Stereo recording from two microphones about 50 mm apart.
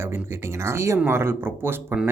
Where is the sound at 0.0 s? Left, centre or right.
Right.